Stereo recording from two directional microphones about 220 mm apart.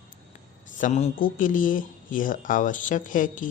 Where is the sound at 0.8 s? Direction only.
35° left (ahead or behind).